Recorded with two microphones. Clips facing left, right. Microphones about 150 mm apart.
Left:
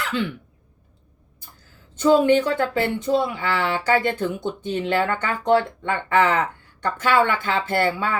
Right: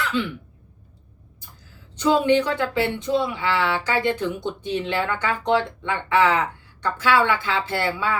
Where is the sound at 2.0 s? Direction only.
45° left (ahead or behind).